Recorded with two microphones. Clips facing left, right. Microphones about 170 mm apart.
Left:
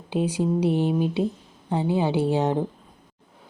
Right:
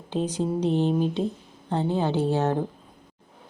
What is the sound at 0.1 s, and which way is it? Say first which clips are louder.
Speech: left 2 dB; 10° left (ahead or behind).